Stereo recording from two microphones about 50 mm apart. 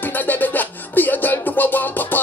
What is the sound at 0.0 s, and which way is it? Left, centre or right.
Music, left.